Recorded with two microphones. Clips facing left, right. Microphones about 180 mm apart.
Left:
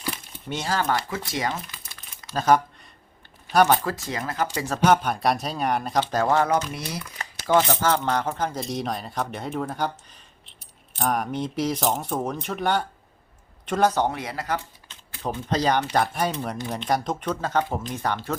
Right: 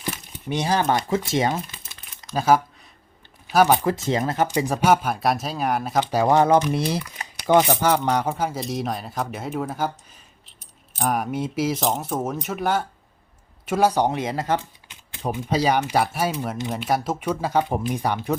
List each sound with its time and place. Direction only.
0.3 s speech: 15° right (ahead or behind)
2.3 s speech: 10° right (ahead or behind)
3.9 s speech: 25° right (ahead or behind)
6.7 s speech: 30° right (ahead or behind)
7.2 s speech: 15° right (ahead or behind)
10.9 s speech: 5° right (ahead or behind); by 14.6 s 25° right (ahead or behind)
14.8 s speech: 15° right (ahead or behind)